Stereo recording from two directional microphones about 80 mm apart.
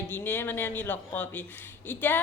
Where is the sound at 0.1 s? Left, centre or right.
Left.